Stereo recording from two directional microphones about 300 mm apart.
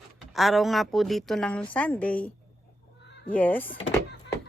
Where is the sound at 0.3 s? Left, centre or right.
Centre.